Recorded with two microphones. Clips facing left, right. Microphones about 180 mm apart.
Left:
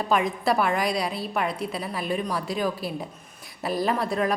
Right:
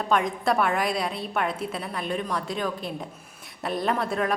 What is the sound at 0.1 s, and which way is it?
A woman's voice, centre (ahead or behind).